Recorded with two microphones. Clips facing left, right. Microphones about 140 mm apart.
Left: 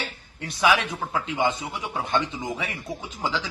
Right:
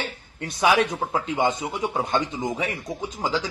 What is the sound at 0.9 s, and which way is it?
Speech, 25° right (ahead or behind).